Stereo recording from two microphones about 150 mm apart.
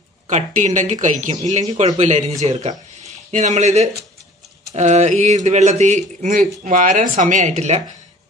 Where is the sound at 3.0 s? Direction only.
55° right (ahead or behind).